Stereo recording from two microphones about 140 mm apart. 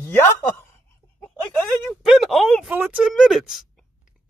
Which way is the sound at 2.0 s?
Centre (ahead or behind).